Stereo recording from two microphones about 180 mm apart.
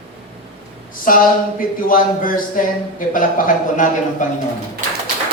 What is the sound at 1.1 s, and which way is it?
Speech, 50° left (ahead or behind).